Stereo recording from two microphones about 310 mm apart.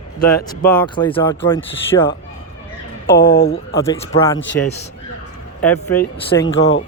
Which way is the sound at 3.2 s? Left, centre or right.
Left.